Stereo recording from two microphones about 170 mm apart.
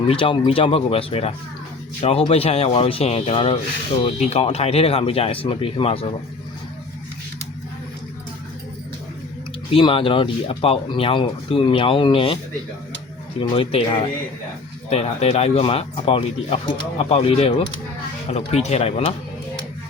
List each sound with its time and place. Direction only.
0.1 s speech: 35° left (ahead or behind)
9.7 s speech: 30° left (ahead or behind)
13.4 s speech: 30° left (ahead or behind)